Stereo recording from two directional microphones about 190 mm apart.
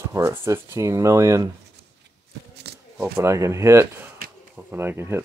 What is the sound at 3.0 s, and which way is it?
Speech, 15° right (ahead or behind).